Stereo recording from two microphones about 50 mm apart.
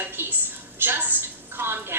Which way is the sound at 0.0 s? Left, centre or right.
Right.